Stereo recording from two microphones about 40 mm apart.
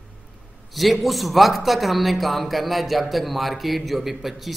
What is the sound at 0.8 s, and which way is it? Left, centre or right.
A man's voice, centre.